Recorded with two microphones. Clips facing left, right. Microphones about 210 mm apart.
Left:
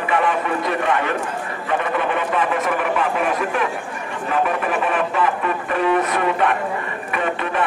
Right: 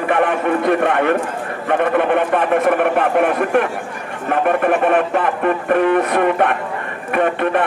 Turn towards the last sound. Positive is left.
turn(degrees=-55)  # may be behind; listen again after turning